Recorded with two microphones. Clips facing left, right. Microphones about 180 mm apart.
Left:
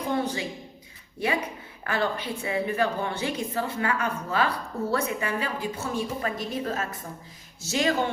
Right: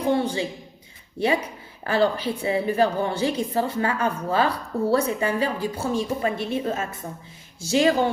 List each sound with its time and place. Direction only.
0.0 s speech: 30° right (ahead or behind)
1.8 s a woman's voice: 30° right (ahead or behind)